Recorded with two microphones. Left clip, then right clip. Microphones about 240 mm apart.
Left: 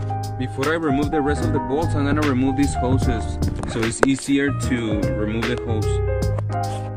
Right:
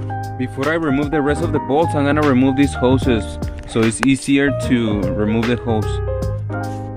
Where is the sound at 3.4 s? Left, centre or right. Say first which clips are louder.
Right 5 dB; centre.